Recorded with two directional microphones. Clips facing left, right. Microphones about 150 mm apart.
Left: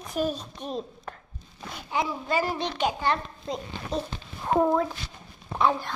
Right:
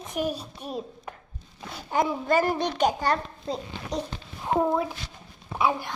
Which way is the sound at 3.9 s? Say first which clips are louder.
Left 1 dB; 15° right (ahead or behind).